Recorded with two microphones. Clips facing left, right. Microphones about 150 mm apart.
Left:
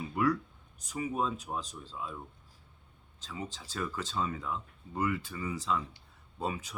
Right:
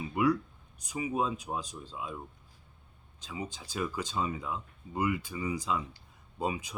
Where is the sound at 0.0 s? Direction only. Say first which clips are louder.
Right 2 dB; 10° right (ahead or behind).